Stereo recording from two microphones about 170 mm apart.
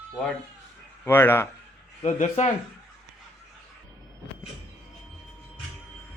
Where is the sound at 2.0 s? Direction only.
45° left (ahead or behind).